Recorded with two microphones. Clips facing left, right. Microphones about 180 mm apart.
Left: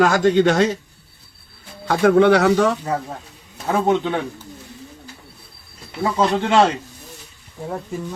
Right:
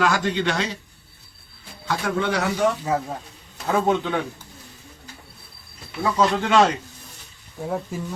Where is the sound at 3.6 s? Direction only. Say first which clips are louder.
Left 3 dB; 20° left (ahead or behind).